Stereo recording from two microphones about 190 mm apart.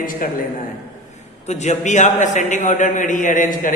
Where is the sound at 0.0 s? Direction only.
45° left (ahead or behind).